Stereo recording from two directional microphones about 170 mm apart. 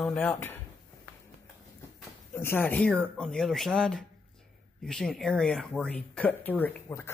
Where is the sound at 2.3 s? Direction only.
15° left (ahead or behind).